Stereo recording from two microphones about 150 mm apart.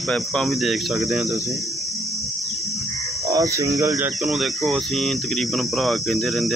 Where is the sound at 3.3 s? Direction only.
20° right (ahead or behind).